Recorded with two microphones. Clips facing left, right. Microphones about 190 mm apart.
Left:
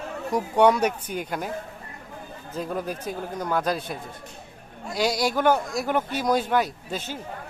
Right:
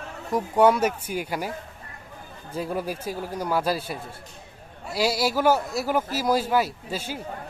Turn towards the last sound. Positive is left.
turn(degrees=-10)  # may be behind; listen again after turning